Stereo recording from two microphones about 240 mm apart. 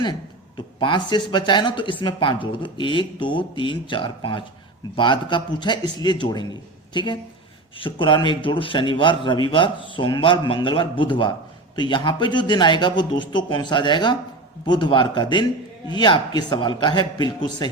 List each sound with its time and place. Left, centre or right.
0.8 s speech: centre